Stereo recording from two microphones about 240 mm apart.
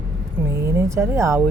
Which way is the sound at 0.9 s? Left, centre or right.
Centre.